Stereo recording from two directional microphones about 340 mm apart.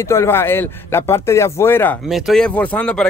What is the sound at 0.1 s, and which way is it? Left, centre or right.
Speech, centre.